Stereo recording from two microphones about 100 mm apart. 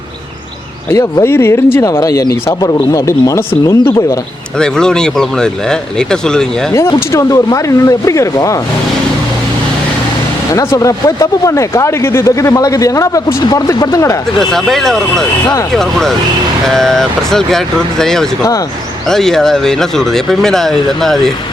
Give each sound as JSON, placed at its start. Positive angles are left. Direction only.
{"t": 0.9, "sound": "speech", "side_deg": 30}
{"t": 4.5, "sound": "speech", "side_deg": 5}
{"t": 6.7, "sound": "speech", "side_deg": 30}
{"t": 10.5, "sound": "speech", "side_deg": 30}
{"t": 14.3, "sound": "speech", "side_deg": 5}